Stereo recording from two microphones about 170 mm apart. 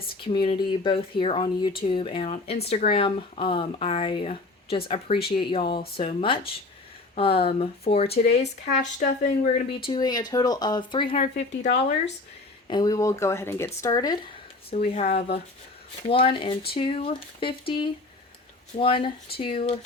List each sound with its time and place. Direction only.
0.2 s speech: 30° left (ahead or behind); by 9.6 s 50° left (ahead or behind)
9.8 s speech: 25° left (ahead or behind); by 12.1 s 45° left (ahead or behind)
12.6 s speech: 25° left (ahead or behind)
14.7 s speech: 40° left (ahead or behind)
16.0 s speech: 30° left (ahead or behind)
18.8 s speech: 30° left (ahead or behind)